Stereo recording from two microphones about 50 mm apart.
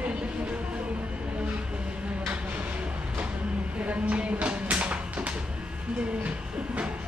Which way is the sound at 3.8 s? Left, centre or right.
Right.